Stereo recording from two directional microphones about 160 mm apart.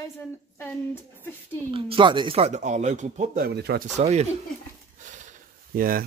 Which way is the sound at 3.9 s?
40° right (ahead or behind).